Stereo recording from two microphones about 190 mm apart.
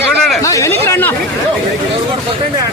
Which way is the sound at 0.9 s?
10° left (ahead or behind).